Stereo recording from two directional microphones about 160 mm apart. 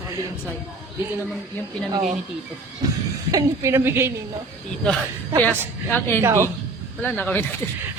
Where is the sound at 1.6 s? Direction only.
15° left (ahead or behind).